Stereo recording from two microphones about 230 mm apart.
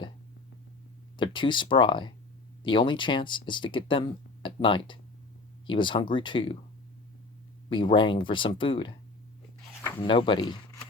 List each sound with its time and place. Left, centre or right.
1.1 s speech: left
7.7 s speech: left
10.0 s speech: left